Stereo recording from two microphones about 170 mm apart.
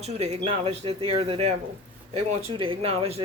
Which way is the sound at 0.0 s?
40° right (ahead or behind).